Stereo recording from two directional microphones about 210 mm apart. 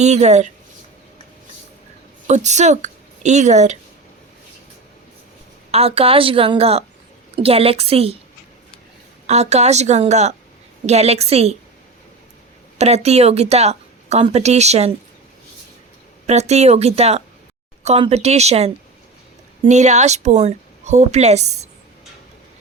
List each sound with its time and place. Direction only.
0.0 s speech: 30° right (ahead or behind)
2.2 s speech: 35° right (ahead or behind)
5.7 s a woman's voice: 30° right (ahead or behind)
9.2 s a woman's voice: 30° right (ahead or behind)
12.8 s speech: 30° right (ahead or behind)
16.2 s speech: 30° right (ahead or behind)